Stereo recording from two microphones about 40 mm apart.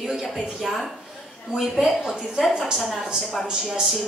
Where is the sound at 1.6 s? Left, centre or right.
Centre.